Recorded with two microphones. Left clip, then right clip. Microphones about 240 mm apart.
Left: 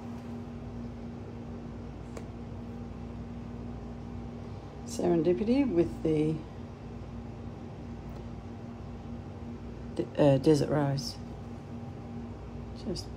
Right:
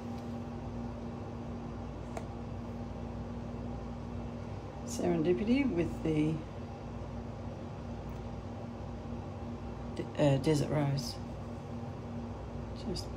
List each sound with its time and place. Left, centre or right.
5.0 s speech: centre
9.9 s speech: centre